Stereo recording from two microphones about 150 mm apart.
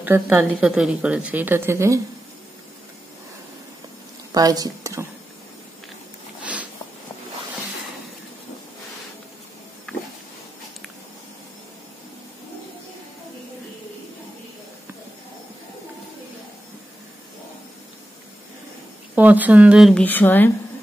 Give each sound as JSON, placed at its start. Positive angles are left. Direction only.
{"t": 0.0, "sound": "a woman's voice", "side_deg": -10}
{"t": 4.3, "sound": "speech", "side_deg": -25}
{"t": 6.4, "sound": "a sound", "side_deg": -10}
{"t": 19.1, "sound": "speech", "side_deg": -10}
{"t": 19.9, "sound": "speech", "side_deg": 10}